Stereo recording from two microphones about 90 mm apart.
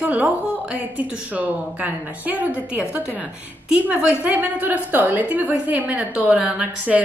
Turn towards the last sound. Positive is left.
turn(degrees=-15)  # may be behind; listen again after turning